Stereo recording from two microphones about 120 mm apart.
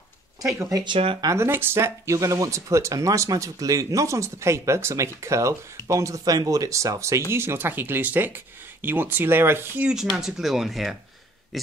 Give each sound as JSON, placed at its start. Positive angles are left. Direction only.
{"t": 0.6, "sound": "speech", "side_deg": -25}
{"t": 0.8, "sound": "speech", "side_deg": -50}
{"t": 1.2, "sound": "speech", "side_deg": -25}
{"t": 10.1, "sound": "speech", "side_deg": -5}